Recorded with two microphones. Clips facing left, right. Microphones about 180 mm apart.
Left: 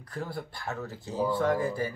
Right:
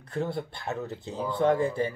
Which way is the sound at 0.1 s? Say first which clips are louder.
Right 5 dB; 25° right (ahead or behind).